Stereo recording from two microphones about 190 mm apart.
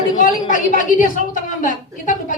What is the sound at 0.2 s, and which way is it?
A woman's voice, 40° left (ahead or behind).